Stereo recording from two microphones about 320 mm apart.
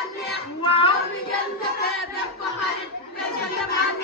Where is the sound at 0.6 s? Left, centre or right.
Centre.